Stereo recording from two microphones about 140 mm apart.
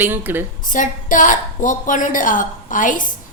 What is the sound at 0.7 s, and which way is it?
A woman's voice, 70° left (ahead or behind).